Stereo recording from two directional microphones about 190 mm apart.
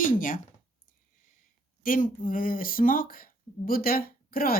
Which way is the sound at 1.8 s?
45° left (ahead or behind).